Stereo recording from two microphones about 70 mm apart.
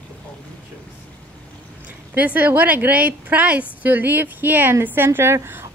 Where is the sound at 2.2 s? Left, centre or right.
Right.